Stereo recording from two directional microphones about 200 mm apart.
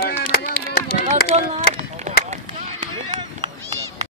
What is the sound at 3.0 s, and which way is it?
Run, 20° right (ahead or behind).